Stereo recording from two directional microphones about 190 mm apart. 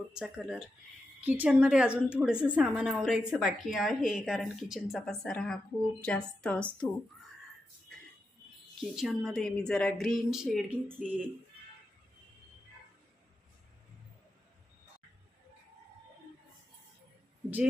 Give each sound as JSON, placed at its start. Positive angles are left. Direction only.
{"t": 0.1, "sound": "a woman's voice", "side_deg": -5}
{"t": 8.8, "sound": "a woman's voice", "side_deg": 0}